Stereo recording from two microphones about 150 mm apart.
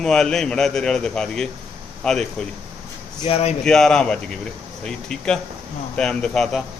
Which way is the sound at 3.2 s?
40° left (ahead or behind).